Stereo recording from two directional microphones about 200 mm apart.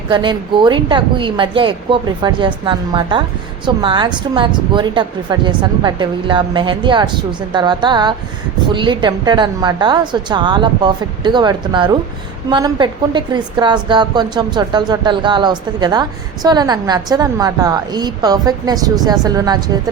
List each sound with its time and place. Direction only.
0.1 s a woman's voice: 25° right (ahead or behind)